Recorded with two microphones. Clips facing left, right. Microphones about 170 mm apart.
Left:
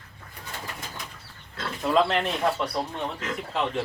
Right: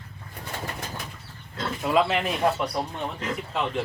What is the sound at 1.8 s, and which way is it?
Speech, 5° right (ahead or behind).